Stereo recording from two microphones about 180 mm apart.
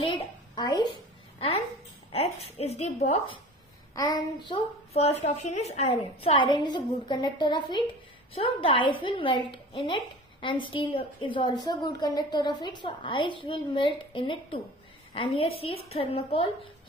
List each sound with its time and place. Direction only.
0.2 s a sound: 25° left (ahead or behind)
2.1 s a woman's voice: 35° left (ahead or behind)
3.9 s a child's voice: 20° left (ahead or behind)